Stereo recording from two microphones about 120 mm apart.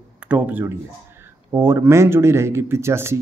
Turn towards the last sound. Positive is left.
turn(degrees=-20)  # may be behind; listen again after turning